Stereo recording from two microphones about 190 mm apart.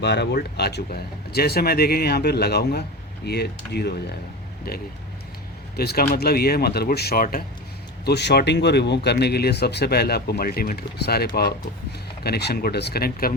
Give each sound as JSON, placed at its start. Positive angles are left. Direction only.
{"t": 0.0, "sound": "speech", "side_deg": 65}
{"t": 5.7, "sound": "speech", "side_deg": 55}
{"t": 8.0, "sound": "speech", "side_deg": 60}